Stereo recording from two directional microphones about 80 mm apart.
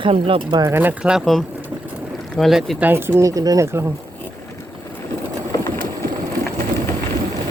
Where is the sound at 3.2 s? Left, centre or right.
Right.